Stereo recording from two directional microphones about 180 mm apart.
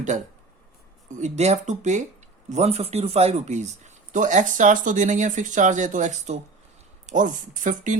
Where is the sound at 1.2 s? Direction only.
40° right (ahead or behind).